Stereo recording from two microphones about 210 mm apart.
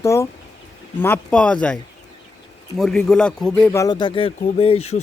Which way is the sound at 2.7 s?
Centre (ahead or behind).